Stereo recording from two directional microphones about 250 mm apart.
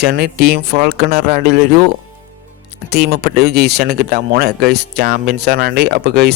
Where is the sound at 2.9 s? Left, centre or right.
Right.